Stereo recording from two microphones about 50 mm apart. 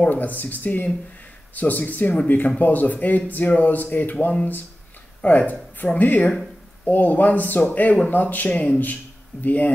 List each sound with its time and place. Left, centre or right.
0.0 s speech: left